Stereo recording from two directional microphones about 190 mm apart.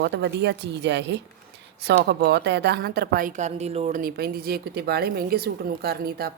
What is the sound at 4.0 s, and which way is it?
A woman's voice, 55° right (ahead or behind).